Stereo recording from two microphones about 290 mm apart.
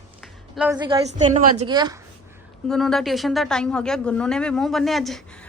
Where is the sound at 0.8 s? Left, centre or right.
Right.